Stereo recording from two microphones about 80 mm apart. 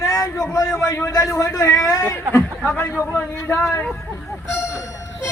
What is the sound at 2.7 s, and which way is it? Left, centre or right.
A woman's voice, left.